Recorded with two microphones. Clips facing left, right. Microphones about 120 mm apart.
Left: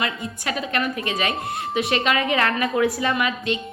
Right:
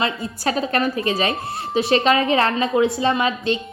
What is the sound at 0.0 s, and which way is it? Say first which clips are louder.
A woman's voice: right 5 dB; 35° right (ahead or behind).